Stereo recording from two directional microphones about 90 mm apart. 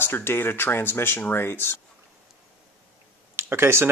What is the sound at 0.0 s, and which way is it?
Speech, 25° left (ahead or behind).